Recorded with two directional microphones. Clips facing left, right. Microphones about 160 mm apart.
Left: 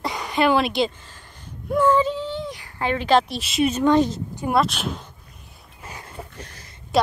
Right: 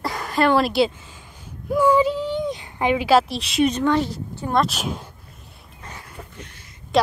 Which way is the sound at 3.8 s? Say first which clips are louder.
Left 3 dB; 20° left (ahead or behind).